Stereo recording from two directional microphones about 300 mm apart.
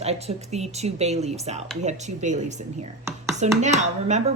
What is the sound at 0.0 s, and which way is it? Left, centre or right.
Speech, right.